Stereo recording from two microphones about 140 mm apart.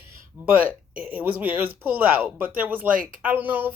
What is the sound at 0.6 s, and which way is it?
Speech, 10° right (ahead or behind).